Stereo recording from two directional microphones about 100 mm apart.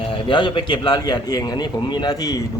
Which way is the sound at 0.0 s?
55° left (ahead or behind).